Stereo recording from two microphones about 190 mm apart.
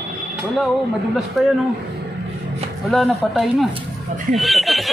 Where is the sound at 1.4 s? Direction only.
Centre (ahead or behind).